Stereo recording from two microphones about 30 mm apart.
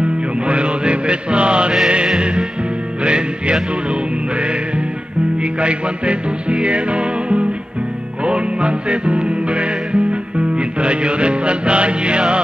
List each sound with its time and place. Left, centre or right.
0.5 s mantra: right
3.0 s music: right
5.6 s music: right